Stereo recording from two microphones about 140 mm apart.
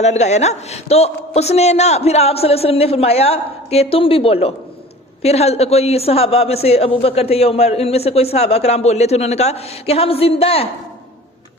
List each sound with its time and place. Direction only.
0.0 s a man's voice: 55° left (ahead or behind)